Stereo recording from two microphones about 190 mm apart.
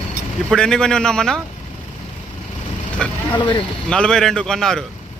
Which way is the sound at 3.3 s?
25° left (ahead or behind).